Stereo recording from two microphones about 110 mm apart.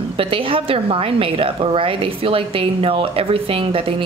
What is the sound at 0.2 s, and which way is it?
A woman's voice, 55° right (ahead or behind).